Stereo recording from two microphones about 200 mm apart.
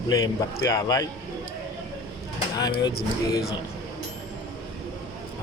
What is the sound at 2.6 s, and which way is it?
Speech, 20° left (ahead or behind).